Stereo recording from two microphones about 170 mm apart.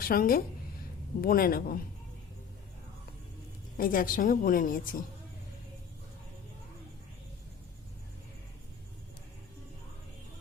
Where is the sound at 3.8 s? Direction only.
55° left (ahead or behind).